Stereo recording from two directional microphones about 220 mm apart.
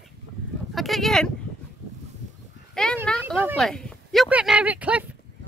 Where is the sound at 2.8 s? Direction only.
5° left (ahead or behind).